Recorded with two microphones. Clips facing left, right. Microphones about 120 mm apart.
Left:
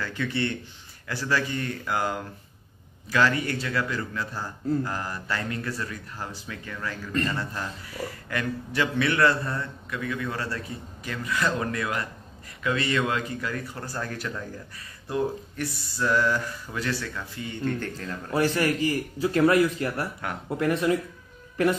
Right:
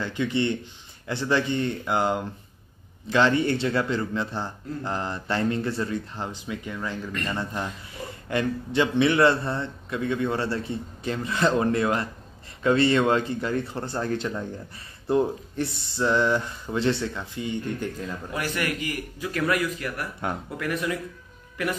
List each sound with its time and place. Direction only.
0.0 s a man's voice: 20° right (ahead or behind)
18.3 s speech: 30° left (ahead or behind)